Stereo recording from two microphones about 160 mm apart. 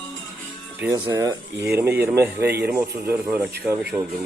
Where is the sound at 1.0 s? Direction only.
20° right (ahead or behind).